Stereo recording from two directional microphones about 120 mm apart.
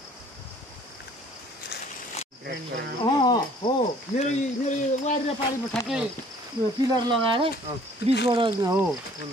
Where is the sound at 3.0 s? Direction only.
35° left (ahead or behind).